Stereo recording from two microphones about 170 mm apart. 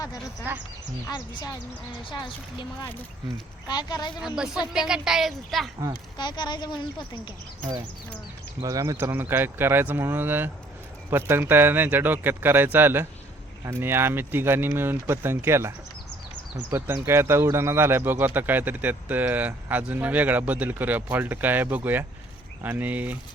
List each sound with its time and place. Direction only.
1.0 s speech: 25° left (ahead or behind)
3.3 s speech: 25° left (ahead or behind)
4.4 s a woman's voice: 5° right (ahead or behind)
6.1 s speech: 25° left (ahead or behind)
8.6 s speech: 20° right (ahead or behind)